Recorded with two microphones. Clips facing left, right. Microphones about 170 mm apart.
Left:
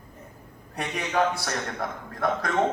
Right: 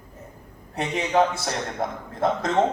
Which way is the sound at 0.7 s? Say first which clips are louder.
Right 5 dB; 25° right (ahead or behind).